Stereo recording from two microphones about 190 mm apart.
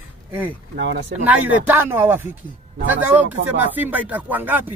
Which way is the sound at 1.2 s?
10° right (ahead or behind).